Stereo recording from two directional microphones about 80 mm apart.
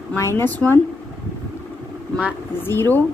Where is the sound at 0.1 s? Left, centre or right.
Left.